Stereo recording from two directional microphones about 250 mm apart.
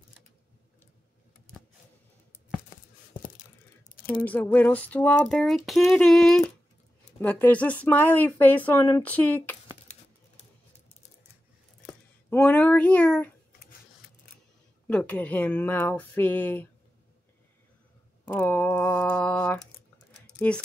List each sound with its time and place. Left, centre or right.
4.1 s child singing: centre
7.2 s speech: centre
12.3 s a sound: centre
13.5 s a sound: left
14.9 s speech: centre
18.2 s speech: centre
20.2 s typing: centre